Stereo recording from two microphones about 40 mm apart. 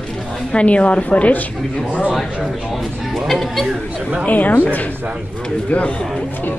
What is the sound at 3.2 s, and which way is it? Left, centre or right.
Speech, centre.